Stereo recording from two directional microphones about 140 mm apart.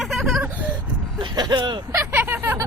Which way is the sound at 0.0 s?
Centre (ahead or behind).